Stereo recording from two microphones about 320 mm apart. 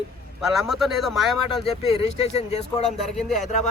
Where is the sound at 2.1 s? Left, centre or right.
Centre.